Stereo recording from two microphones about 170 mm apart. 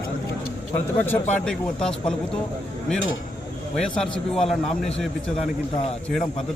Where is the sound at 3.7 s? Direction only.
5° left (ahead or behind).